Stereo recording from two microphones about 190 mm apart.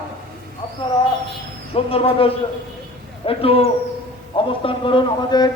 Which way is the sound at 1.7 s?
30° left (ahead or behind).